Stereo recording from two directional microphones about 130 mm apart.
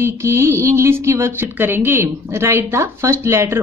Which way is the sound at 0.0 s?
20° right (ahead or behind).